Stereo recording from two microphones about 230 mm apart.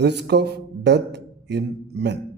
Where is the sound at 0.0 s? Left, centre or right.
Right.